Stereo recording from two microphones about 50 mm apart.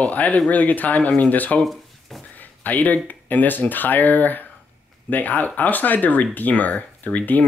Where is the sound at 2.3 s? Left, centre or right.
Left.